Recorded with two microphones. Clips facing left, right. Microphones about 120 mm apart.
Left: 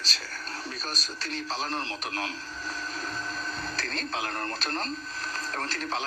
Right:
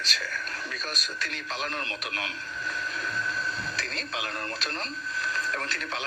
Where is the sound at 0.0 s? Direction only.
35° left (ahead or behind).